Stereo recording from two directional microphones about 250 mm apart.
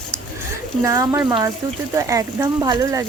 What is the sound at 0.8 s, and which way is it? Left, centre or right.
Speech, centre.